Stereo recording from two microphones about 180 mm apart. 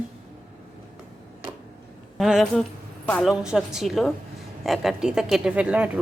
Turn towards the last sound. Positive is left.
turn(degrees=-5)  # may be behind; listen again after turning